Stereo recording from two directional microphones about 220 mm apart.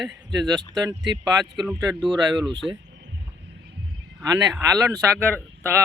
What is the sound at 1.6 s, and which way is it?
Speech, 20° right (ahead or behind).